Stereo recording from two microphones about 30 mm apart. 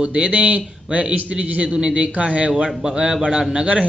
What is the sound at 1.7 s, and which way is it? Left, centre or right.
Speech, right.